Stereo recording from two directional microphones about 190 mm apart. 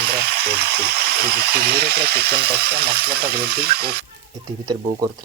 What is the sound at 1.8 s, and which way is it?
Speech, 55° right (ahead or behind).